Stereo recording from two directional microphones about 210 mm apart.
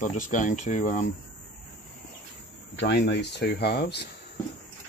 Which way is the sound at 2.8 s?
55° left (ahead or behind).